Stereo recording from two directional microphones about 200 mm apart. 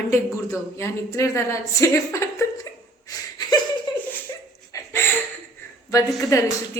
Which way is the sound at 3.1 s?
20° left (ahead or behind).